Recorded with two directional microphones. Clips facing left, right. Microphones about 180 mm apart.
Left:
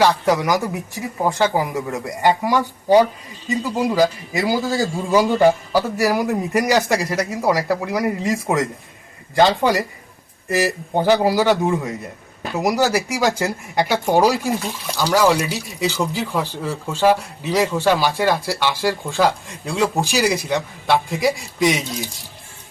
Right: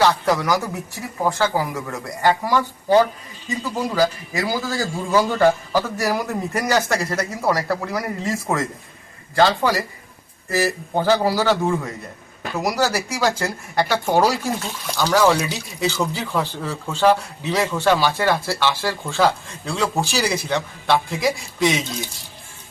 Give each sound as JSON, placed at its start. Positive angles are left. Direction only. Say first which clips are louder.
{"t": 0.0, "sound": "speech", "louder": "left 2 dB", "side_deg": 15}
{"t": 14.8, "sound": "speech", "louder": "even", "side_deg": 0}